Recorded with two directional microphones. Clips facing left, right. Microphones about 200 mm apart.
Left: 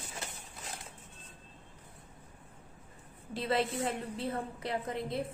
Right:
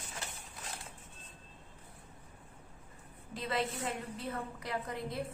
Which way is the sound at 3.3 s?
30° left (ahead or behind).